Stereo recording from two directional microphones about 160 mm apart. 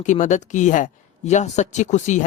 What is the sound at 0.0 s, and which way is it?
Speech, 50° left (ahead or behind).